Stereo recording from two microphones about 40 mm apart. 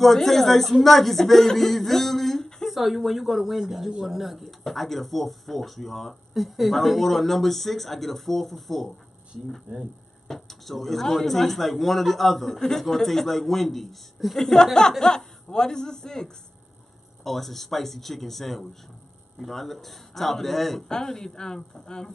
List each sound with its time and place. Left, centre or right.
0.0 s speech: centre
9.7 s speech: right
10.2 s a man's voice: centre
17.2 s a man's voice: centre